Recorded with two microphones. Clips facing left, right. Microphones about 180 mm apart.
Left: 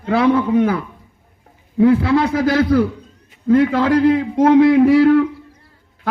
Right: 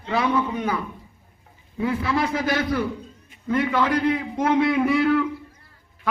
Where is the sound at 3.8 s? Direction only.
90° left.